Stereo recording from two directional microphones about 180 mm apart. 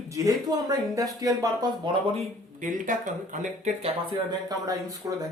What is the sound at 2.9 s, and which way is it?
Speech, 45° right (ahead or behind).